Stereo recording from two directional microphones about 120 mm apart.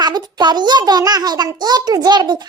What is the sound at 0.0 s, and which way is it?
A child's voice, 35° right (ahead or behind).